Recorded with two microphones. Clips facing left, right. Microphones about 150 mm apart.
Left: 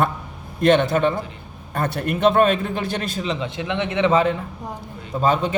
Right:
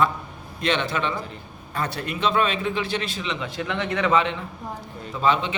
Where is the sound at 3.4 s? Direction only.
25° left (ahead or behind).